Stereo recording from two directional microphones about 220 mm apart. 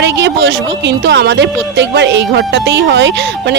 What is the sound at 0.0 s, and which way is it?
Speech, 55° right (ahead or behind).